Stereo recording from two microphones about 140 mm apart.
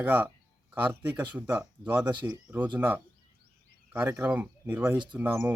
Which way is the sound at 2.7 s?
15° right (ahead or behind).